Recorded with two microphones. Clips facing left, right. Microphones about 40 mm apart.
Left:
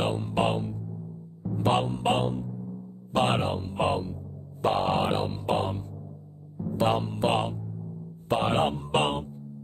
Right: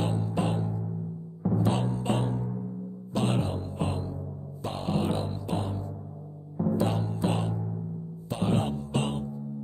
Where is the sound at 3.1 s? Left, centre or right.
Left.